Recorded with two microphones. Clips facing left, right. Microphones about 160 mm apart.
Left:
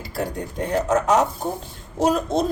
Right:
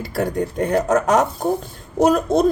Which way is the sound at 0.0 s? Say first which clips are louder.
Right 6 dB; 55° right (ahead or behind).